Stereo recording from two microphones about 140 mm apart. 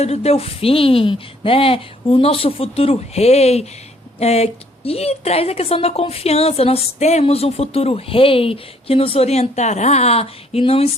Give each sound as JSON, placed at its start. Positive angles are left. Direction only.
{"t": 0.0, "sound": "a woman's voice", "side_deg": 50}